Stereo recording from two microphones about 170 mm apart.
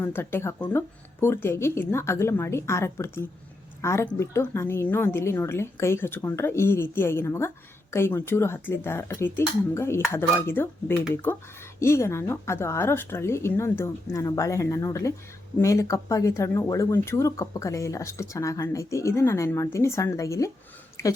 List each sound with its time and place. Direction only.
0.0 s a woman's voice: 15° left (ahead or behind)